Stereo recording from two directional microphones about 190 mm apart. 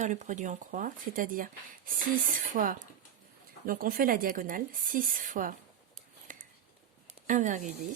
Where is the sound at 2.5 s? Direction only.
45° right (ahead or behind).